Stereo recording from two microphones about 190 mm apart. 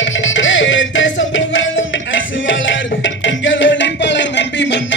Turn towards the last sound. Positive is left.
turn(degrees=70)  # may be behind; listen again after turning